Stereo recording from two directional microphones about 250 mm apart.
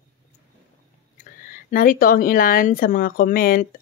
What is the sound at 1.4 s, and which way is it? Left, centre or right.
Speech, left.